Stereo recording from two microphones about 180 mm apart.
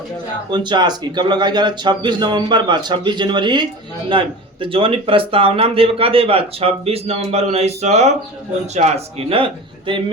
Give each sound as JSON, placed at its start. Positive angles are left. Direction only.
{"t": 0.5, "sound": "speech", "side_deg": -25}